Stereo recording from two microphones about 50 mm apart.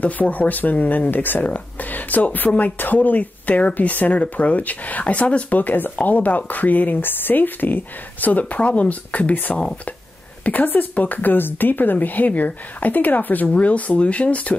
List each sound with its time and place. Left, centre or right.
0.0 s speech: left